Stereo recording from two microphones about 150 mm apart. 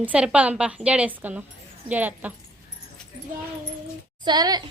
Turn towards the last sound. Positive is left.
turn(degrees=-25)  # may be behind; listen again after turning